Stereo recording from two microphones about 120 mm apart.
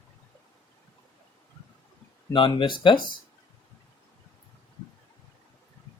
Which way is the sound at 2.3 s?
45° left (ahead or behind).